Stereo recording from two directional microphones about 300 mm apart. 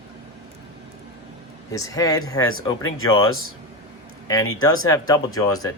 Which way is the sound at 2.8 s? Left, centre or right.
Left.